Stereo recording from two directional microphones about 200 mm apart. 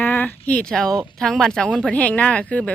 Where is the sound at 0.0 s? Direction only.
10° left (ahead or behind).